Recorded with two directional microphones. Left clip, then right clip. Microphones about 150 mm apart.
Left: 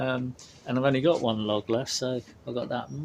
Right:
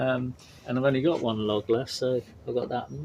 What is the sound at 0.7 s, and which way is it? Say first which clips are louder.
Speech: left 1 dB; 35° left (ahead or behind).